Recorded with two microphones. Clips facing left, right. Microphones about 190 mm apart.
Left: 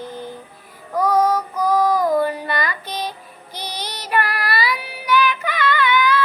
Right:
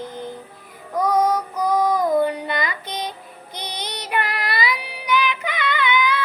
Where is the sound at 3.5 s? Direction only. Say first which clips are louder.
Left 1 dB; 55° right (ahead or behind).